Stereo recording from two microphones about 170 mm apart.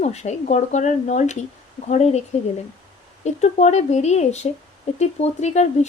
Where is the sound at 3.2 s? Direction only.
40° left (ahead or behind).